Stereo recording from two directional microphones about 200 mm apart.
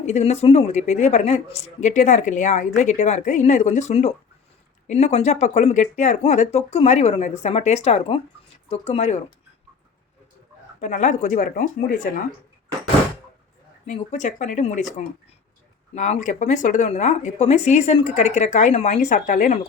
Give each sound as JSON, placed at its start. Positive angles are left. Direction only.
{"t": 0.0, "sound": "speech", "side_deg": 35}
{"t": 10.8, "sound": "speech", "side_deg": 35}
{"t": 13.8, "sound": "speech", "side_deg": 35}
{"t": 16.0, "sound": "speech", "side_deg": 35}